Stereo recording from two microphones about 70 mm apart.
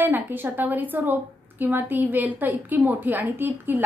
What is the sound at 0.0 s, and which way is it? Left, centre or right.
A woman's voice, right.